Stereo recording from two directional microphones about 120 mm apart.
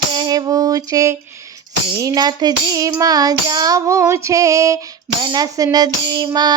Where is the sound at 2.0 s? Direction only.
30° right (ahead or behind).